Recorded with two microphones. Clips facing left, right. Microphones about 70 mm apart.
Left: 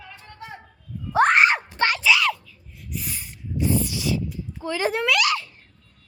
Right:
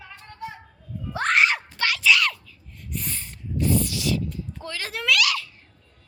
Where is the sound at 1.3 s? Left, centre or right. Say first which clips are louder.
Left 3 dB; left.